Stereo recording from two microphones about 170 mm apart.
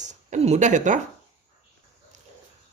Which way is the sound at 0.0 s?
45° right (ahead or behind).